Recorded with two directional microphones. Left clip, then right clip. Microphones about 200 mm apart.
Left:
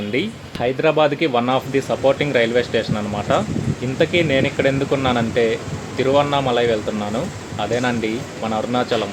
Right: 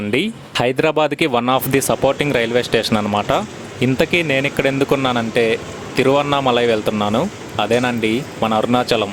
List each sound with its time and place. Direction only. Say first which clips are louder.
0.1 s speech: right 6 dB; 40° right (ahead or behind)